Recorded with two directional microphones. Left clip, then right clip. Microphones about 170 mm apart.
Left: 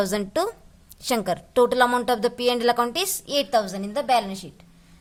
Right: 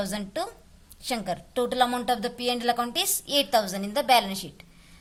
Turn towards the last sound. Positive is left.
turn(degrees=5)  # may be behind; listen again after turning